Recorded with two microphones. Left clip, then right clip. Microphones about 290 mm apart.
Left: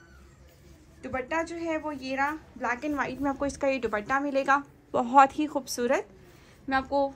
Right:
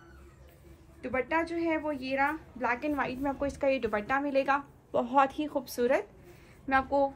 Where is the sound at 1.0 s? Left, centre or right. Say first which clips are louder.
Even; centre.